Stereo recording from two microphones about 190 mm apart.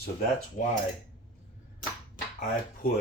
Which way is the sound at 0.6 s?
40° left (ahead or behind).